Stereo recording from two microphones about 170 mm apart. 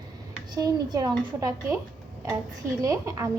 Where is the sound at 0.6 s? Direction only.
20° right (ahead or behind).